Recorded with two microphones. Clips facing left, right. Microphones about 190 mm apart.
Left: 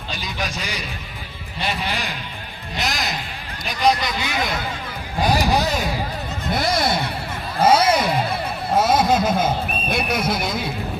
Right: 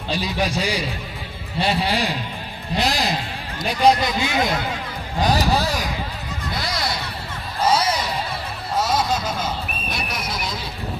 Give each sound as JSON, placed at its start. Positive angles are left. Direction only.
{"t": 0.1, "sound": "a man's voice", "side_deg": -30}
{"t": 5.4, "sound": "speech", "side_deg": 20}
{"t": 6.6, "sound": "speech", "side_deg": 55}
{"t": 7.6, "sound": "a sound", "side_deg": 55}
{"t": 8.7, "sound": "speech", "side_deg": 55}